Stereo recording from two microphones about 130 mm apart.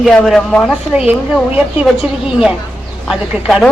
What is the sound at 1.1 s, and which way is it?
A woman's voice, 10° right (ahead or behind).